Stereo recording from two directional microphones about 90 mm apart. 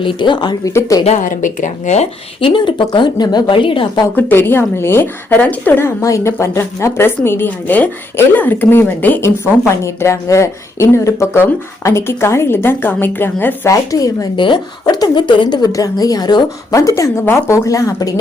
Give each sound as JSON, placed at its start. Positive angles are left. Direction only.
{"t": 0.0, "sound": "speech", "side_deg": 65}
{"t": 0.6, "sound": "speech", "side_deg": 35}
{"t": 2.4, "sound": "a woman's voice", "side_deg": 70}
{"t": 4.1, "sound": "a woman's voice", "side_deg": 25}
{"t": 6.0, "sound": "a woman's voice", "side_deg": 35}
{"t": 13.7, "sound": "speech", "side_deg": 40}
{"t": 14.3, "sound": "speech", "side_deg": 65}
{"t": 14.9, "sound": "a woman's voice", "side_deg": 45}
{"t": 15.3, "sound": "speech", "side_deg": 60}
{"t": 15.7, "sound": "a woman's voice", "side_deg": 45}
{"t": 16.7, "sound": "speech", "side_deg": 35}